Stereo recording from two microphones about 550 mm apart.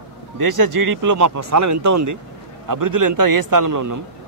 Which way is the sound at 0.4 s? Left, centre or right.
Right.